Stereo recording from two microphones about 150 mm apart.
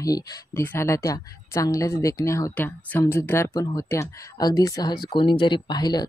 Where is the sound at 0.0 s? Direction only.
25° left (ahead or behind).